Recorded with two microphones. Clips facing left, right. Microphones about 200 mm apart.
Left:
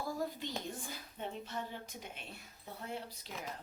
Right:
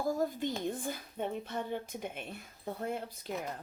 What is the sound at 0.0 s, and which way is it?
A woman's voice, 45° right (ahead or behind).